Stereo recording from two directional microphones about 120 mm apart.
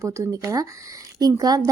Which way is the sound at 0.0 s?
25° right (ahead or behind).